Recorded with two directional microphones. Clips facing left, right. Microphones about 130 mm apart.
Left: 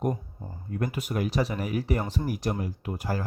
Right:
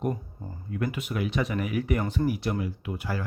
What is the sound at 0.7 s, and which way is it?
Speech, 40° left (ahead or behind).